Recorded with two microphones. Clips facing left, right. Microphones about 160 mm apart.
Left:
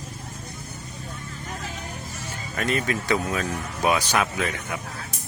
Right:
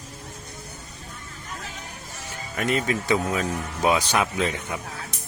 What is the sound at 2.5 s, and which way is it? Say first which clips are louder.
Speech: right 1 dB; 20° right (ahead or behind).